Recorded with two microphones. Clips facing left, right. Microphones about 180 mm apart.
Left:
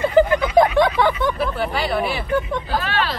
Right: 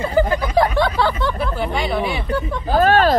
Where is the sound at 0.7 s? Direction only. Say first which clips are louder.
Left 2 dB; 20° left (ahead or behind).